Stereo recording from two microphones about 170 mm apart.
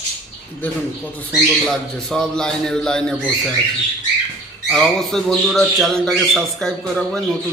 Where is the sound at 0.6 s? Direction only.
10° left (ahead or behind).